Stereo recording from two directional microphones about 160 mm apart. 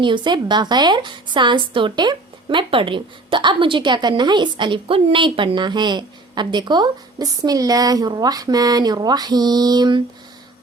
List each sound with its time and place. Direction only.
0.0 s a woman's voice: 30° right (ahead or behind)